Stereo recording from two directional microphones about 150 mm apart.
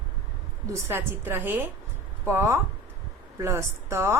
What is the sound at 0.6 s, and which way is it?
A woman's voice, 15° right (ahead or behind).